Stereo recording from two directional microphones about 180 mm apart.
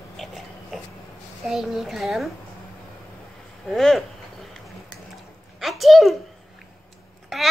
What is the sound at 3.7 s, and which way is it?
Speech, centre (ahead or behind).